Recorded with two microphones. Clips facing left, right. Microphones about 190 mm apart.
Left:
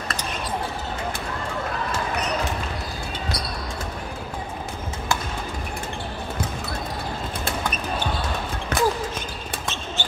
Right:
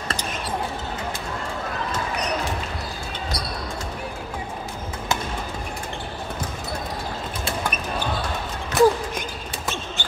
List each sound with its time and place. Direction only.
8.7 s basketball bounce: 60° left (ahead or behind)